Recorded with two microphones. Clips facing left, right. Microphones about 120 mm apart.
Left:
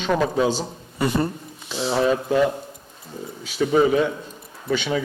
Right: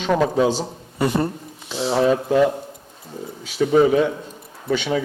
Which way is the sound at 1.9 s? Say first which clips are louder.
Right 3 dB; 45° right (ahead or behind).